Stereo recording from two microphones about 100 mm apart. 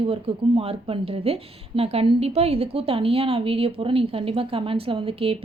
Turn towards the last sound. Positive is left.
turn(degrees=-70)  # may be behind; listen again after turning